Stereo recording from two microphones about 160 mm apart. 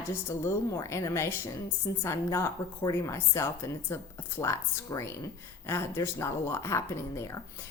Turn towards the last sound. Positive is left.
turn(degrees=20)  # may be behind; listen again after turning